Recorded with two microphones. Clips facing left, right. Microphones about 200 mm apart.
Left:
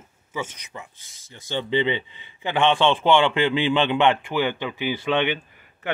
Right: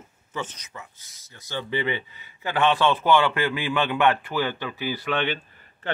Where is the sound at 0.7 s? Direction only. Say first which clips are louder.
Left 4 dB; 25° left (ahead or behind).